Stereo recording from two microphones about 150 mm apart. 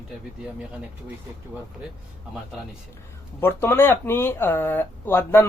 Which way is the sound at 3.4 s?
15° left (ahead or behind).